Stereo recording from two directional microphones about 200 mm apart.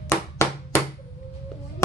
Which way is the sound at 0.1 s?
15° left (ahead or behind).